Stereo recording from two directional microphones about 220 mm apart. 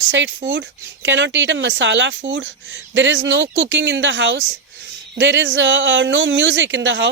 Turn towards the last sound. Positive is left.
turn(degrees=-55)  # may be behind; listen again after turning